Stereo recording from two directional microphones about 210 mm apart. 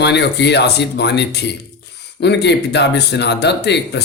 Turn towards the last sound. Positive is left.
turn(degrees=55)  # may be behind; listen again after turning